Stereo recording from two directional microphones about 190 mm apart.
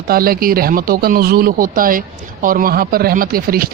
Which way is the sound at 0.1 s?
50° right (ahead or behind).